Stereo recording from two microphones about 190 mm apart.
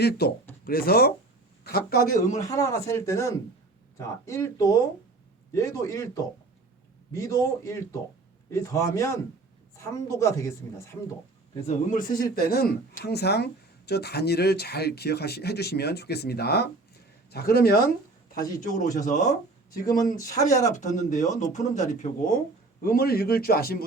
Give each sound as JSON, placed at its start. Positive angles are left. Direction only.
{"t": 0.0, "sound": "speech", "side_deg": 55}
{"t": 2.4, "sound": "a woman's voice", "side_deg": 15}
{"t": 11.6, "sound": "speech", "side_deg": 45}
{"t": 18.6, "sound": "speech", "side_deg": 40}
{"t": 20.1, "sound": "a woman's voice", "side_deg": 20}
{"t": 20.7, "sound": "speech", "side_deg": 40}